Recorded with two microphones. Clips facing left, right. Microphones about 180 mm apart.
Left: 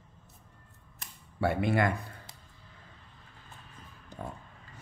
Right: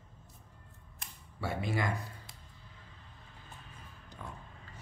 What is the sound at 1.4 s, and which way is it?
Speech, 60° left (ahead or behind).